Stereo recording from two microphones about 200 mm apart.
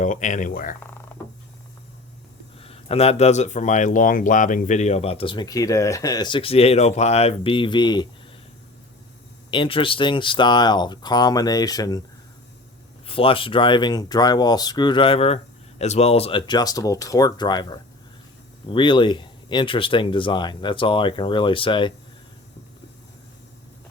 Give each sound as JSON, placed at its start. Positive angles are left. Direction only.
{"t": 0.0, "sound": "speech", "side_deg": 40}
{"t": 2.6, "sound": "speech", "side_deg": 30}
{"t": 9.5, "sound": "speech", "side_deg": 25}
{"t": 13.1, "sound": "speech", "side_deg": 25}